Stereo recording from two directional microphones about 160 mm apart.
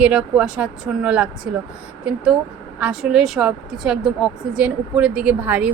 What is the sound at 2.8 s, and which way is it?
Speech, 5° right (ahead or behind).